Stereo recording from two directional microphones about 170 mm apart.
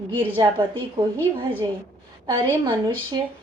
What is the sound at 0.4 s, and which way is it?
Speech, 25° right (ahead or behind).